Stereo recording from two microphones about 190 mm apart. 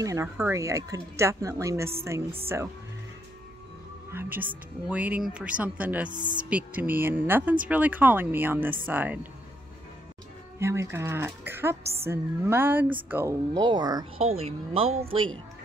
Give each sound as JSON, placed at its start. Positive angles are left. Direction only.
{"t": 0.0, "sound": "speech", "side_deg": -15}
{"t": 4.1, "sound": "speech", "side_deg": -10}
{"t": 6.0, "sound": "a woman's voice", "side_deg": -25}
{"t": 6.5, "sound": "speech", "side_deg": -10}
{"t": 10.6, "sound": "a woman's voice", "side_deg": -15}